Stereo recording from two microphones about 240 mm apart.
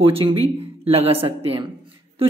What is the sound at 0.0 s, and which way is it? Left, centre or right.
Speech, right.